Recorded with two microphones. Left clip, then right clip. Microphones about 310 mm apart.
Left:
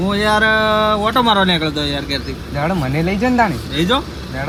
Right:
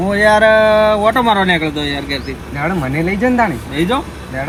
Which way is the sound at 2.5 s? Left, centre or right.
Left.